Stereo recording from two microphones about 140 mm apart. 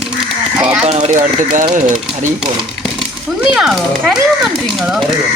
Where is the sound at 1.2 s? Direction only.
65° right (ahead or behind).